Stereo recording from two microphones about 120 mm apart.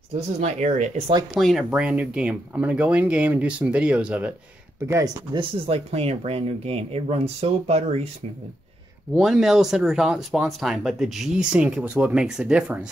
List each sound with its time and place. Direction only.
0.4 s speech: 75° right (ahead or behind)
1.3 s speech: centre (ahead or behind)
4.8 s speech: 25° right (ahead or behind)
5.3 s speech: 45° right (ahead or behind)
5.9 s speech: 55° right (ahead or behind)
9.1 s speech: 5° right (ahead or behind)